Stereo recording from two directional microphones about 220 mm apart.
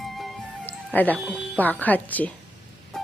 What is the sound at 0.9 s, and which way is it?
Speech, 5° left (ahead or behind).